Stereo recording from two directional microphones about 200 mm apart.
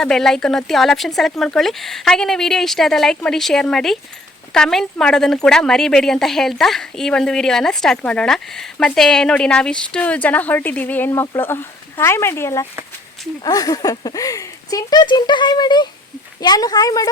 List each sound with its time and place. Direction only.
0.0 s a woman's voice: centre (ahead or behind); by 17.1 s 20° left (ahead or behind)